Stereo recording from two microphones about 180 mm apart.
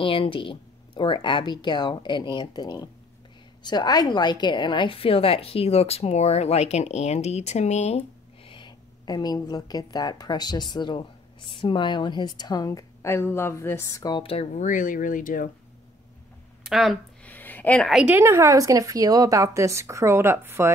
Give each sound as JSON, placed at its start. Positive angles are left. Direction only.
{"t": 0.0, "sound": "a woman's voice", "side_deg": 30}
{"t": 8.5, "sound": "a woman's voice", "side_deg": 25}
{"t": 16.6, "sound": "a woman's voice", "side_deg": 0}